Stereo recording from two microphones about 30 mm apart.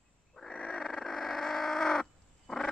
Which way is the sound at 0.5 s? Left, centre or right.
Left.